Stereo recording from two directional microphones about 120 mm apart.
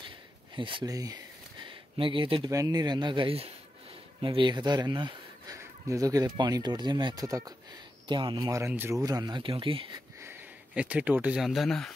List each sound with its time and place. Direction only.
0.6 s speech: 45° right (ahead or behind)
0.8 s a sound: 30° right (ahead or behind); by 2.5 s 45° right (ahead or behind)
2.5 s speech: 30° right (ahead or behind)
5.6 s speech: 30° right (ahead or behind)
7.2 s speech: 30° right (ahead or behind)
8.1 s speech: 40° right (ahead or behind)
8.5 s speech: 20° right (ahead or behind)
9.0 s speech: 35° right (ahead or behind)
10.2 s speech: 15° right (ahead or behind); by 11.9 s centre (ahead or behind)